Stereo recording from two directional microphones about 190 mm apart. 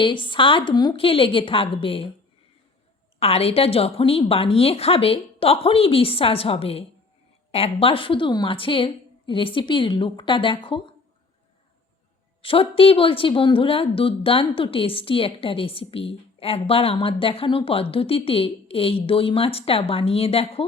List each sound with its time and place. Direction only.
0.0 s speech: 25° left (ahead or behind)
3.2 s a woman's voice: 30° left (ahead or behind)
12.4 s speech: 30° left (ahead or behind)